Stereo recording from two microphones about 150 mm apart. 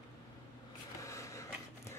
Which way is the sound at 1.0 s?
20° left (ahead or behind).